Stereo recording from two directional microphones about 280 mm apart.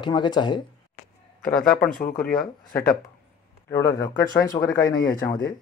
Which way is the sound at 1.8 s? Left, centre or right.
Left.